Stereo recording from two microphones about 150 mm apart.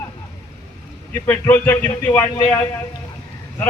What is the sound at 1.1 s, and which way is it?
A man's voice, 15° left (ahead or behind).